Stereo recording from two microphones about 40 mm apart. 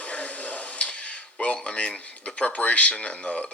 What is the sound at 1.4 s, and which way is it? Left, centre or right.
Speech, left.